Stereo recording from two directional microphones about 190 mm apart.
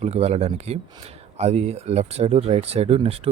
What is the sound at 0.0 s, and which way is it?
Speech, 35° right (ahead or behind).